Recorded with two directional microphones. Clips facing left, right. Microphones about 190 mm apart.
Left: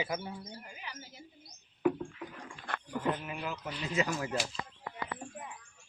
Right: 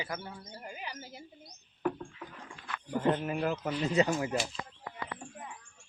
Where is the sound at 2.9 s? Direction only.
25° right (ahead or behind).